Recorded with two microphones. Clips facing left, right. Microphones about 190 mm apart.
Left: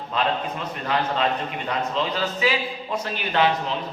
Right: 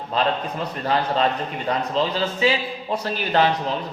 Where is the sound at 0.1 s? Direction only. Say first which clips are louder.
Right 2 dB; 35° right (ahead or behind).